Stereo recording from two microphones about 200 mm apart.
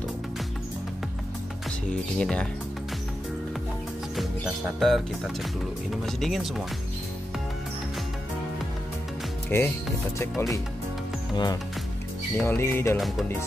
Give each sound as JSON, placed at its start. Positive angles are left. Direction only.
{"t": 2.1, "sound": "speech", "side_deg": 5}
{"t": 4.7, "sound": "speech", "side_deg": 0}
{"t": 9.5, "sound": "music", "side_deg": 10}
{"t": 11.3, "sound": "speech", "side_deg": 20}
{"t": 12.4, "sound": "music", "side_deg": 10}